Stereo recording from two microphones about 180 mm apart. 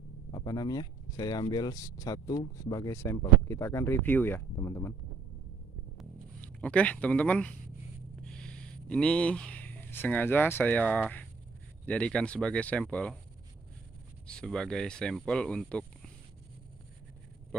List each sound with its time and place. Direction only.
0.3 s speech: 20° left (ahead or behind)
5.9 s a sound: 5° left (ahead or behind)
8.2 s speech: 5° left (ahead or behind)
14.2 s speech: 5° left (ahead or behind)